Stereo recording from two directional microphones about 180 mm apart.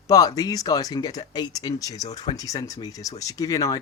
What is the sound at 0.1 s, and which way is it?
Speech, 20° left (ahead or behind).